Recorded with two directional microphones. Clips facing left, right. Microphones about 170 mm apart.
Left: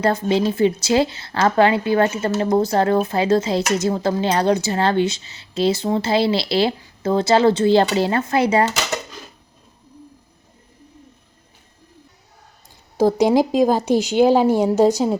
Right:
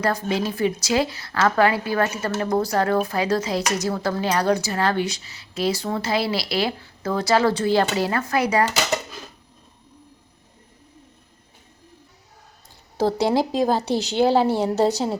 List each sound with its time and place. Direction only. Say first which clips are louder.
0.0 s speech: left 5 dB; 25° left (ahead or behind)
13.0 s speech: left 5 dB; 15° left (ahead or behind)